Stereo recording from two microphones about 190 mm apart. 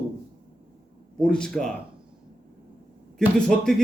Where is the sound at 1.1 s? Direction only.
5° left (ahead or behind).